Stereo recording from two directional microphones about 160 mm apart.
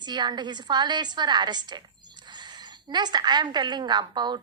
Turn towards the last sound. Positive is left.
turn(degrees=-25)  # may be behind; listen again after turning